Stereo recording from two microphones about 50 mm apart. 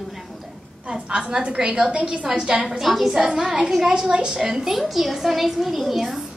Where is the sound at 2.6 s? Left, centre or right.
Centre.